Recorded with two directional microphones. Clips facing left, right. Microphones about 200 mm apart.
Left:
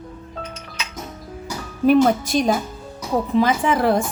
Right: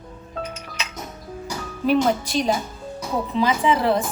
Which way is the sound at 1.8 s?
50° left (ahead or behind).